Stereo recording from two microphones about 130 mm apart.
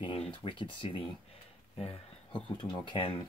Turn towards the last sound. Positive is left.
turn(degrees=45)  # may be behind; listen again after turning